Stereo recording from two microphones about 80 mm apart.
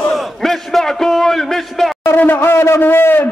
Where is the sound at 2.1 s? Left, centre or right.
Left.